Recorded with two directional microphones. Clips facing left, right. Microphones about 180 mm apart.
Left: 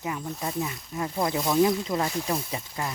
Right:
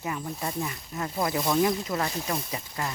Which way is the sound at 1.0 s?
15° left (ahead or behind).